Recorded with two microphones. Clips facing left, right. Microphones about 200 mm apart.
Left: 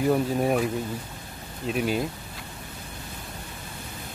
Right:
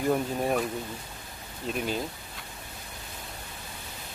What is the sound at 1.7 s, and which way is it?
Speech, 5° left (ahead or behind).